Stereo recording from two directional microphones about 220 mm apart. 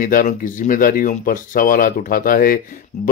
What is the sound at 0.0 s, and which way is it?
Speech, 35° left (ahead or behind).